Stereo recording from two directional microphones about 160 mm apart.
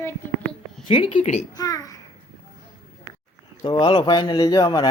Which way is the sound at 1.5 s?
20° left (ahead or behind).